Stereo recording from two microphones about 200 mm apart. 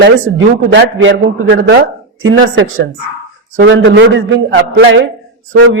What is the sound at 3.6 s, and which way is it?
A man's voice, 65° right (ahead or behind).